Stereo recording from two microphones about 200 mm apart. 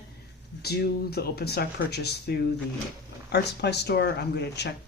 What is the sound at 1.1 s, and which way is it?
Speech, 50° left (ahead or behind).